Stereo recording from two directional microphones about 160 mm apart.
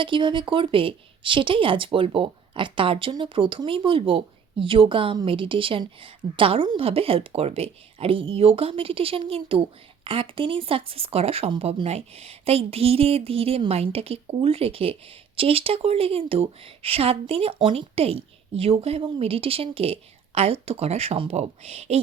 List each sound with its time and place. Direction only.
0.0 s speech: 30° right (ahead or behind)